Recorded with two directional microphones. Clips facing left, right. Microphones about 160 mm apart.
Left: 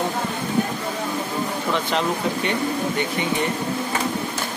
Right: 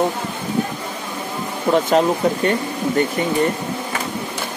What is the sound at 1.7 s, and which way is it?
Speech, 45° right (ahead or behind).